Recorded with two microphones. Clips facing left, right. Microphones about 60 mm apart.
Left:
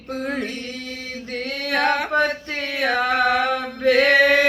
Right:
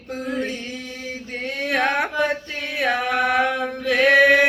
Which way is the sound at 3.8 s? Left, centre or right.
Left.